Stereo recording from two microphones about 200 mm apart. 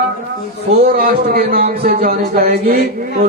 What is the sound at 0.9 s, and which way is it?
A man's voice, 50° right (ahead or behind).